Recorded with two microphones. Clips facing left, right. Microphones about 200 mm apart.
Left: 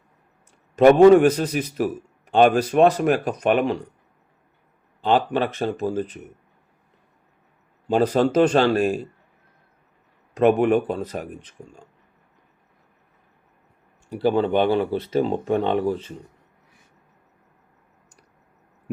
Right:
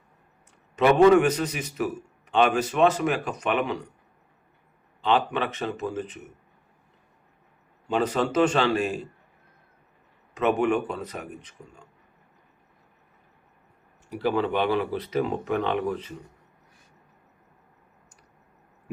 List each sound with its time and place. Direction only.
0.8 s speech: 40° left (ahead or behind)
2.3 s speech: 45° left (ahead or behind)
5.0 s speech: 40° left (ahead or behind)
7.9 s speech: 35° left (ahead or behind)
10.3 s speech: 35° left (ahead or behind)
14.1 s speech: 30° left (ahead or behind)